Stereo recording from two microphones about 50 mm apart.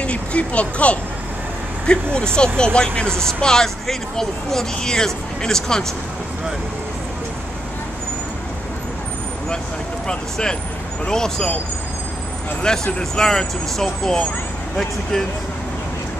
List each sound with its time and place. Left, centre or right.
0.0 s speech: left
10.0 s speech: centre
12.6 s speech: centre